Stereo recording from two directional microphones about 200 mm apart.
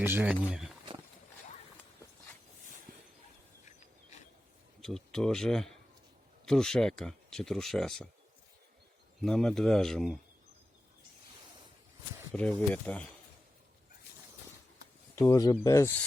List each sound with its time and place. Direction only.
0.0 s speech: 10° right (ahead or behind)
4.8 s speech: centre (ahead or behind)
9.2 s speech: centre (ahead or behind)
12.3 s speech: 5° left (ahead or behind)
15.1 s speech: 15° left (ahead or behind)